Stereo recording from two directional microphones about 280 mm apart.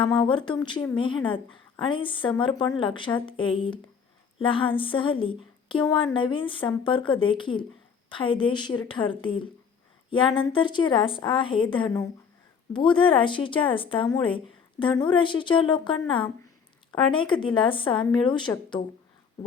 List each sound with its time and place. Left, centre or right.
0.2 s a woman's voice: centre
4.4 s a sound: centre
4.8 s a woman's voice: centre